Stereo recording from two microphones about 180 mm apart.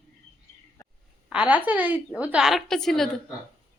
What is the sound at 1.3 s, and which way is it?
Speech, 5° right (ahead or behind).